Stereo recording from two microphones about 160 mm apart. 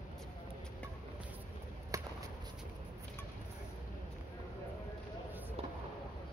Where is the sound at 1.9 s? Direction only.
20° right (ahead or behind).